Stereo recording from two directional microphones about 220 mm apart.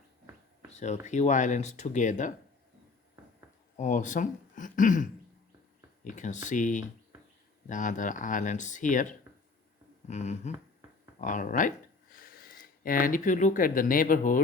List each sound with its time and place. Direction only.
0.7 s speech: 30° left (ahead or behind)
3.8 s speech: 35° left (ahead or behind)
6.1 s speech: 35° left (ahead or behind)